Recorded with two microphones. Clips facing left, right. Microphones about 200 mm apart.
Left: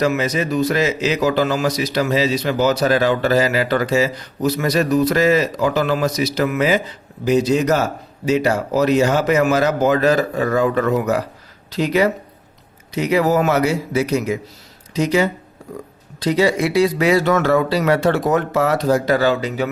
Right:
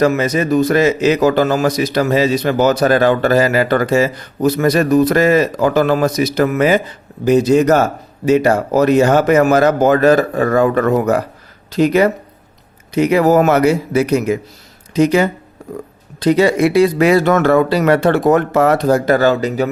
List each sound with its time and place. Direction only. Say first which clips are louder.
0.0 s a man's voice: right 4 dB; 50° right (ahead or behind)